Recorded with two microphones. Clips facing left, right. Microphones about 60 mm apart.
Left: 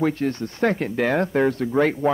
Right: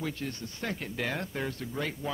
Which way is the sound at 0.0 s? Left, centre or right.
Left.